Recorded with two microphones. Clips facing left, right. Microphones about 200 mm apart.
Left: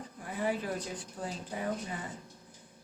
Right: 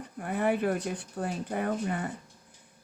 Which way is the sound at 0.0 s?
65° right (ahead or behind).